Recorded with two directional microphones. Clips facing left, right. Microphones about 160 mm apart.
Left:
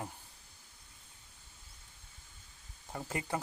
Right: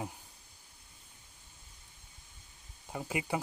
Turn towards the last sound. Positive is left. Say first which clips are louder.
# right 2 dB
turn(degrees=-10)  # may be behind; listen again after turning